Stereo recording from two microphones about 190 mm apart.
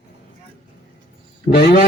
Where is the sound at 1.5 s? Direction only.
55° left (ahead or behind).